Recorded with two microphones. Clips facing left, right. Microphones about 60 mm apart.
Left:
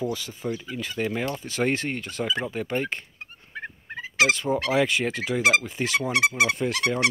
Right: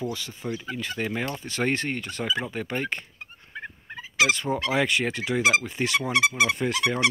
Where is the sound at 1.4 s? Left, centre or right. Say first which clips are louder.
Even; right.